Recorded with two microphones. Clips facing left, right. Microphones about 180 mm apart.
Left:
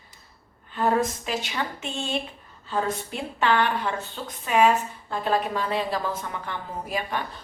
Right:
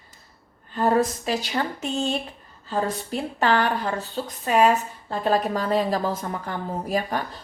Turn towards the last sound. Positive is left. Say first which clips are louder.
# right 4 dB
turn(degrees=-40)  # may be behind; listen again after turning